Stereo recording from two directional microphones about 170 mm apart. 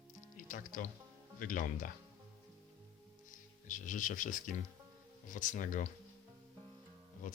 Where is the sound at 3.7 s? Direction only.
50° left (ahead or behind).